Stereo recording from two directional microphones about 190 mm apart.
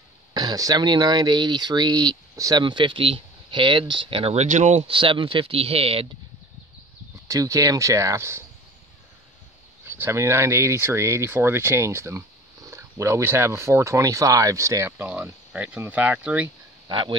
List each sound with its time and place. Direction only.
0.3 s speech: 20° right (ahead or behind)
7.2 s speech: 15° right (ahead or behind)
9.8 s speech: 10° right (ahead or behind)
16.9 s speech: 25° right (ahead or behind)